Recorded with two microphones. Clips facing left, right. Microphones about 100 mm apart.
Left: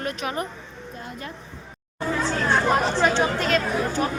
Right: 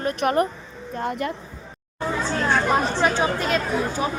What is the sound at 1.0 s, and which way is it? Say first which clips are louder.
Speech: right 12 dB; 65° right (ahead or behind).